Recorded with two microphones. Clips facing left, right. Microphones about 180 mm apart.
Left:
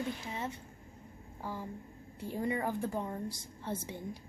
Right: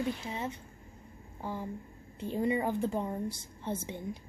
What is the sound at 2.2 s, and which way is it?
A woman's voice, 20° right (ahead or behind).